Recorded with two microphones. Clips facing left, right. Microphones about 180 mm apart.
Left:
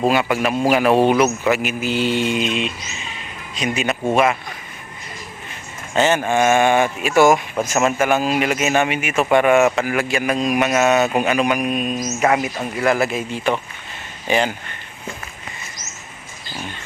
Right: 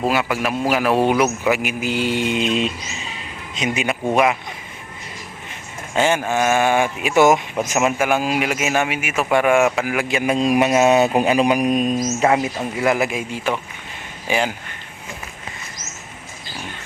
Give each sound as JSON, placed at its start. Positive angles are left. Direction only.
{"t": 0.1, "sound": "a man's voice", "side_deg": -5}
{"t": 2.5, "sound": "speech", "side_deg": -40}
{"t": 3.5, "sound": "a man's voice", "side_deg": -20}
{"t": 5.9, "sound": "a man's voice", "side_deg": -10}